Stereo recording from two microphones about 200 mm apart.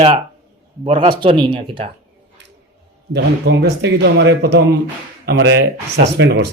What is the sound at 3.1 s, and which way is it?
A man's voice, 60° right (ahead or behind).